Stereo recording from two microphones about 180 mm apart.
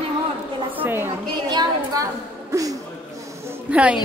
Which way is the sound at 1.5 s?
20° right (ahead or behind).